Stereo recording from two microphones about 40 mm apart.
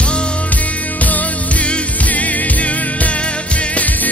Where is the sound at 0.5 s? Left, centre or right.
Left.